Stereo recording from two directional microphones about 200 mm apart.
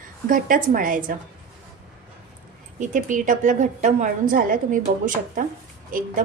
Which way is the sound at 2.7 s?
40° right (ahead or behind).